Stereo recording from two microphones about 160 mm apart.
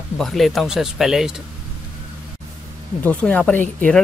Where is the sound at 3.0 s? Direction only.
10° left (ahead or behind).